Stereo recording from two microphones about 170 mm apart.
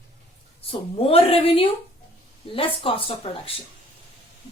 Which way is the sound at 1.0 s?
35° left (ahead or behind).